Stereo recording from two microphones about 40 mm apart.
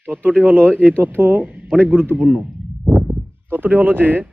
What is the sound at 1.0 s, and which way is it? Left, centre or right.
Speech, right.